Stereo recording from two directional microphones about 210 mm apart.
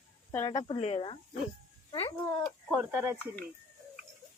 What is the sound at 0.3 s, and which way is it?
A child's voice, 20° left (ahead or behind).